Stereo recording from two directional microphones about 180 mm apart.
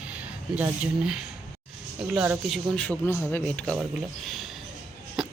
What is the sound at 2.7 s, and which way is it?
Speech, 5° left (ahead or behind).